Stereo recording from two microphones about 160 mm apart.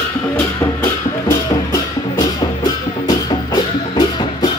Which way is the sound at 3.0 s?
30° left (ahead or behind).